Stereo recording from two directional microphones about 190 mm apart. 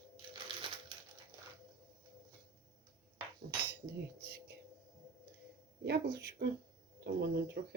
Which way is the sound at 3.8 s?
55° right (ahead or behind).